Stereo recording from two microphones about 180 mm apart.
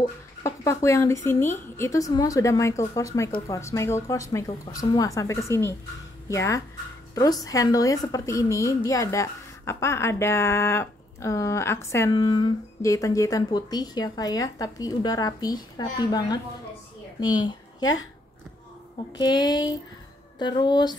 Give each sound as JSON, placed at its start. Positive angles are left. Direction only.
{"t": 0.4, "sound": "a woman's voice", "side_deg": 15}
{"t": 19.1, "sound": "a woman's voice", "side_deg": 25}